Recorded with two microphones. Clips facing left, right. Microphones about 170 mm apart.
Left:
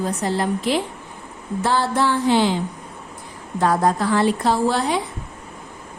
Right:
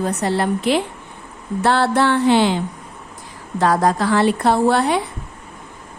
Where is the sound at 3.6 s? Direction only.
90° right; by 5.0 s 60° right (ahead or behind).